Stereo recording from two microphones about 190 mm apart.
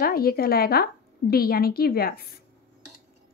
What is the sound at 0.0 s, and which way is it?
A woman's voice, 50° left (ahead or behind).